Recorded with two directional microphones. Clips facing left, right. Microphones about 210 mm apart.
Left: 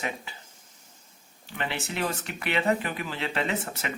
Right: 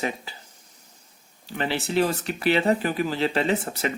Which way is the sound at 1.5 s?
35° right (ahead or behind).